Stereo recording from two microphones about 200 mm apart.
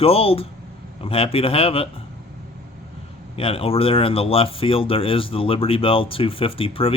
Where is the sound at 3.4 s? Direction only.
30° left (ahead or behind).